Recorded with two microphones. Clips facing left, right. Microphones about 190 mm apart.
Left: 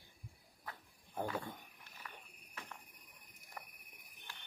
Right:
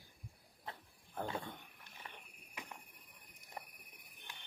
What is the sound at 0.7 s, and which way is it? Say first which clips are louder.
Cricket: right 1 dB; 25° right (ahead or behind).